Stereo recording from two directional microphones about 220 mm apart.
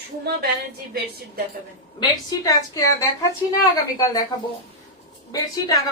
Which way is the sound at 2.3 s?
15° left (ahead or behind).